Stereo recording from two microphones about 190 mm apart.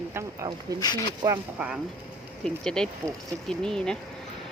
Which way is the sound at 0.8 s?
20° left (ahead or behind).